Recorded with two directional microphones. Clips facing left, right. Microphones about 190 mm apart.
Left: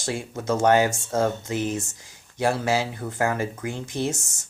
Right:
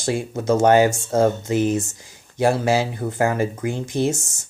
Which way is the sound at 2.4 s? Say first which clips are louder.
Right 5 dB; 10° right (ahead or behind).